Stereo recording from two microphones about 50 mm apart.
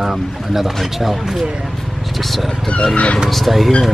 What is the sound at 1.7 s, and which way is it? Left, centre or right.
Vehicle, centre.